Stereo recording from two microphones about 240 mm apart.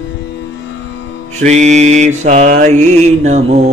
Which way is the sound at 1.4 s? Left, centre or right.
Right.